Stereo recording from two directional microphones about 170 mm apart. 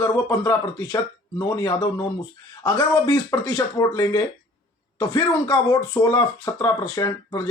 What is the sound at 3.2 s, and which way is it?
Speech, 20° left (ahead or behind).